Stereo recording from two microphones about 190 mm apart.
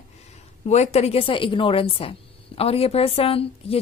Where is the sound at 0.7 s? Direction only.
35° left (ahead or behind).